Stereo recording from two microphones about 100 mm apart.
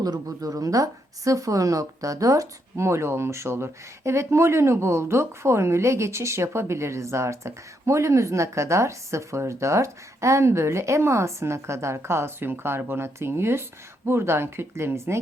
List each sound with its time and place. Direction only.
0.3 s speech: 35° right (ahead or behind)